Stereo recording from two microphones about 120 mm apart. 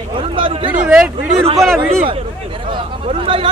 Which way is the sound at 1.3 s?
60° right (ahead or behind).